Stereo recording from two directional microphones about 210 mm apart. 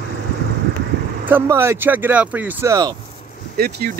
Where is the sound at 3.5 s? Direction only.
50° right (ahead or behind).